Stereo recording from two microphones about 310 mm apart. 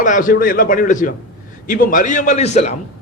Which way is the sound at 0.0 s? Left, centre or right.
Left.